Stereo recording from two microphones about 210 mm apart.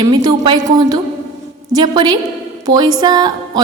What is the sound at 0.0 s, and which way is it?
A woman's voice, 20° right (ahead or behind).